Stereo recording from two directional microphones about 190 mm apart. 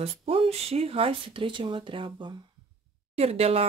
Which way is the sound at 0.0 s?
30° right (ahead or behind).